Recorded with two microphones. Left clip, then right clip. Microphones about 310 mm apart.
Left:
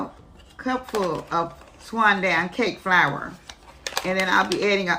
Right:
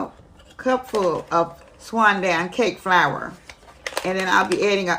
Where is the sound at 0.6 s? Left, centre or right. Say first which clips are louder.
Right 6 dB; right.